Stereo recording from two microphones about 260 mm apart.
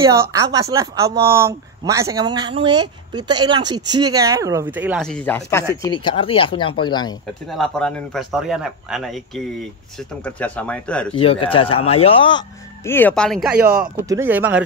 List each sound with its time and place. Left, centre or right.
0.0 s speech: centre
7.4 s a man's voice: centre
11.1 s speech: left; by 14.6 s centre